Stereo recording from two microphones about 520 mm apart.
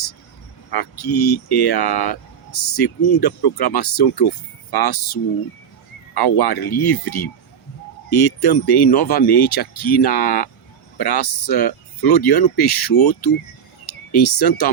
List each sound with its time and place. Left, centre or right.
0.7 s speech: left